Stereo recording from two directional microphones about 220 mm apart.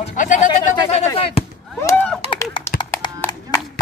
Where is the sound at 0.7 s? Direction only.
25° left (ahead or behind).